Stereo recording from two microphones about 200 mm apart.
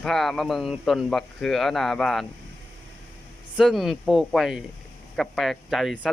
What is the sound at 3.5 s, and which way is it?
Speech, centre (ahead or behind).